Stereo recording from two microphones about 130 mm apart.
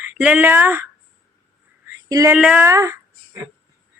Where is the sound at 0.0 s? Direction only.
10° right (ahead or behind).